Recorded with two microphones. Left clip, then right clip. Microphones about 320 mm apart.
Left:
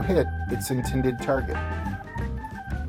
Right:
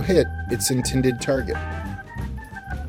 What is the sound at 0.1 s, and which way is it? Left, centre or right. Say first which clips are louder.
Speech: right 6 dB; right.